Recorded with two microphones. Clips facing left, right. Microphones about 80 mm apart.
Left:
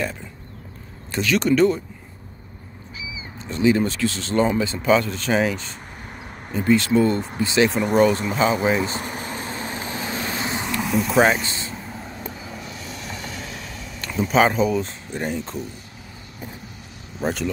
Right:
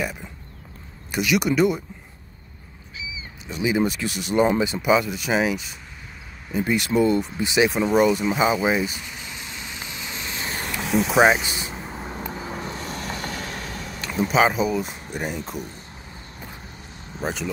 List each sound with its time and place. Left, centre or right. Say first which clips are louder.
1.1 s speech: left 2 dB; centre
3.4 s speech: left 3 dB; centre
8.9 s vehicle: left 8 dB; left
10.8 s vehicle: right 1 dB; centre
12.4 s vehicle: right 4 dB; right
14.0 s speech: left 1 dB; centre
17.2 s speech: left 3 dB; centre